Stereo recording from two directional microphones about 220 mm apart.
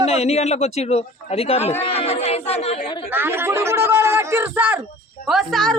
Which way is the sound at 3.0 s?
10° right (ahead or behind).